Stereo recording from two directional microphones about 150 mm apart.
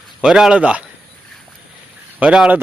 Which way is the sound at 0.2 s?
5° right (ahead or behind).